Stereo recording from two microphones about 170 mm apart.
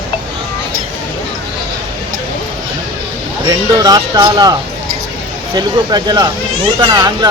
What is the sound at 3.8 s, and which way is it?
Speech, 25° right (ahead or behind).